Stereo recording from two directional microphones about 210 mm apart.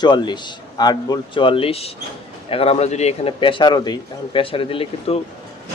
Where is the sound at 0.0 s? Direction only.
20° left (ahead or behind).